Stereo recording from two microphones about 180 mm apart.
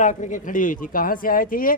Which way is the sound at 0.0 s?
45° left (ahead or behind).